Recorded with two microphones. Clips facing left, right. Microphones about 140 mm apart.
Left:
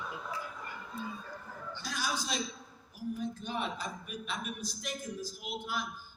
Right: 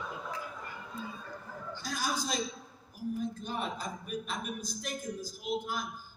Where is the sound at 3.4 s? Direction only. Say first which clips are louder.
Even; 40° right (ahead or behind).